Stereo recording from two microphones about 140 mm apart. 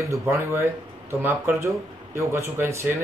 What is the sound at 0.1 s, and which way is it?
Speech, 20° right (ahead or behind).